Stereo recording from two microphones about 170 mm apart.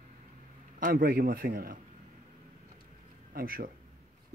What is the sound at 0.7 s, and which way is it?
A man's voice, 55° right (ahead or behind).